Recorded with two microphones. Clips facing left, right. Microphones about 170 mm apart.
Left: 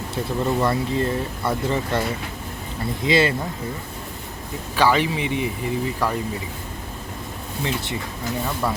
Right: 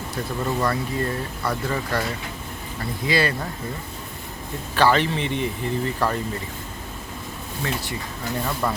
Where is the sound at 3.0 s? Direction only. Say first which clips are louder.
Left 3 dB; 20° left (ahead or behind).